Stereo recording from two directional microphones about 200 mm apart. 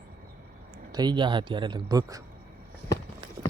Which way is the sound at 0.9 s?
20° right (ahead or behind).